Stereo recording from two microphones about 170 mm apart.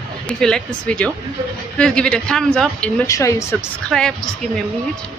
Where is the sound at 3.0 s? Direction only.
20° left (ahead or behind).